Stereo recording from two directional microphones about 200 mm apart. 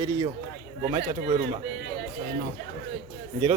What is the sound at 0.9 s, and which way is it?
Speech, 30° right (ahead or behind).